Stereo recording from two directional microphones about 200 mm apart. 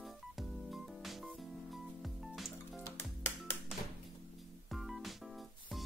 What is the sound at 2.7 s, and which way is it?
Music, 10° left (ahead or behind).